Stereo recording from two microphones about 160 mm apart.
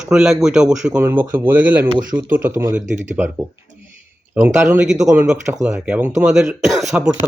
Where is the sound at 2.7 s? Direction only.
50° right (ahead or behind).